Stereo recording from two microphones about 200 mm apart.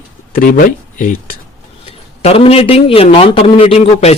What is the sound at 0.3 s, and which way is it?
Speech, 45° left (ahead or behind).